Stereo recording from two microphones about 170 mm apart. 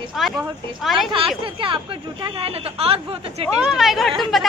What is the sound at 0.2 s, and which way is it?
Speech, centre (ahead or behind).